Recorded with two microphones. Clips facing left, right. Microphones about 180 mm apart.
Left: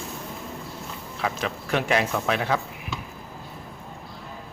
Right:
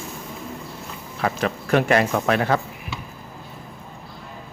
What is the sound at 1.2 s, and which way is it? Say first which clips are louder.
Speech: right 5 dB; 50° right (ahead or behind).